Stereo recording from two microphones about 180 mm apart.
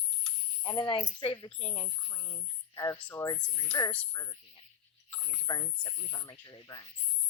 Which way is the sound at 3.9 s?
10° left (ahead or behind).